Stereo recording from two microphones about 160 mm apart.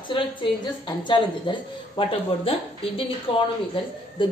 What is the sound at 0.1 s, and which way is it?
A woman's voice, 30° left (ahead or behind).